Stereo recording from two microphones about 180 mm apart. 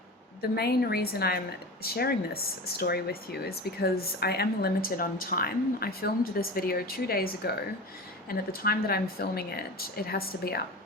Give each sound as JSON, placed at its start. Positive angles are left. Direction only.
{"t": 0.5, "sound": "speech", "side_deg": 60}